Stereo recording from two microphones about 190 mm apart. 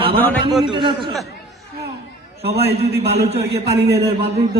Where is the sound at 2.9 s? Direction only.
60° right (ahead or behind).